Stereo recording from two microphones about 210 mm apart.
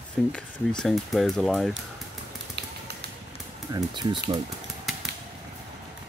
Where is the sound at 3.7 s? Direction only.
20° right (ahead or behind).